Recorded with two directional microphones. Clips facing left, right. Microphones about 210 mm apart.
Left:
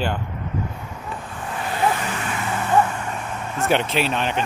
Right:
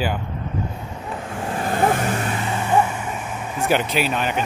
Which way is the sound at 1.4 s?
40° right (ahead or behind).